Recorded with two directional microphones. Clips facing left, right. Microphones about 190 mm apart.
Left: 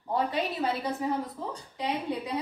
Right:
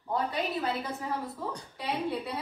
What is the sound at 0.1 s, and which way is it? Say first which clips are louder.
A woman's voice: left 2 dB; 20° left (ahead or behind).